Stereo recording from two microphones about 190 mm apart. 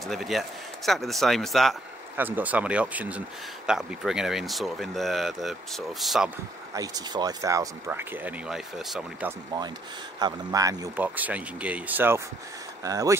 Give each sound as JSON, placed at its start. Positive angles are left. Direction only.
{"t": 0.0, "sound": "speech", "side_deg": 0}
{"t": 2.1, "sound": "speech", "side_deg": -10}
{"t": 6.7, "sound": "speech", "side_deg": -20}
{"t": 10.1, "sound": "speech", "side_deg": -20}